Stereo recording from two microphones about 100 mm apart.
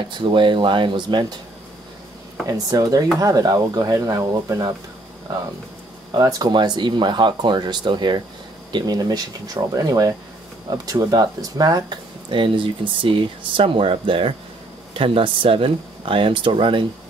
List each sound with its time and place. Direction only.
0.3 s speech: 55° right (ahead or behind)
2.4 s speech: 40° right (ahead or behind)
6.1 s speech: 40° right (ahead or behind); by 16.8 s 55° right (ahead or behind)